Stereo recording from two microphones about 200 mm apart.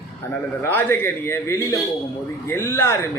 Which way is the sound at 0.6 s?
10° left (ahead or behind).